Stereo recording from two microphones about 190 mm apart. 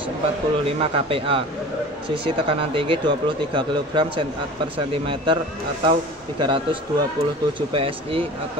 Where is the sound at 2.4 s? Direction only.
30° right (ahead or behind).